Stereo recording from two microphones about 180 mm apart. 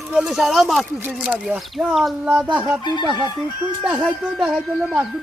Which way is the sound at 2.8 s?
25° left (ahead or behind).